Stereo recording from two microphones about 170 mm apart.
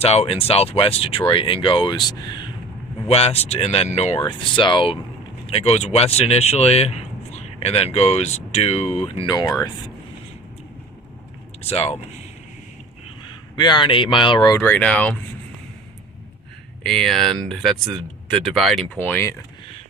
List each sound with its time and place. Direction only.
0.0 s speech: 35° left (ahead or behind)
3.1 s speech: 35° left (ahead or behind)
4.3 s speech: 30° left (ahead or behind)
11.7 s speech: 35° left (ahead or behind)
13.2 s speech: 25° left (ahead or behind); by 15.2 s 10° left (ahead or behind)
16.8 s speech: centre (ahead or behind)